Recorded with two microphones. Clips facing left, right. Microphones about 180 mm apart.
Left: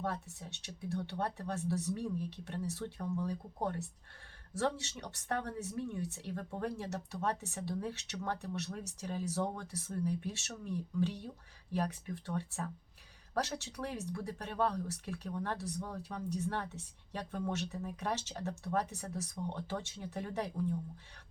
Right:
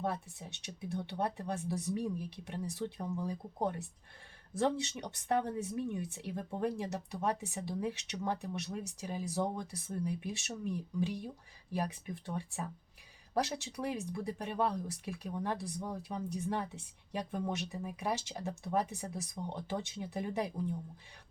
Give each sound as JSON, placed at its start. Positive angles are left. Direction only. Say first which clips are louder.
{"t": 0.0, "sound": "speech", "louder": "right 2 dB", "side_deg": -15}